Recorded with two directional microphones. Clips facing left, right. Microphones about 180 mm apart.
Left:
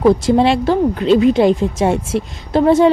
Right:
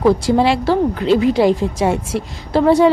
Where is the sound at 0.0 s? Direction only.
20° left (ahead or behind).